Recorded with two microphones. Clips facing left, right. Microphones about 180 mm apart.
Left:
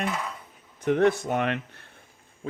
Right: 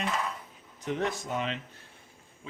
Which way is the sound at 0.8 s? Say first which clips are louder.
Left 10 dB; 60° left (ahead or behind).